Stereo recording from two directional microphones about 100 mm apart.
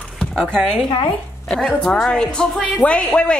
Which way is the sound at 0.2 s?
5° left (ahead or behind).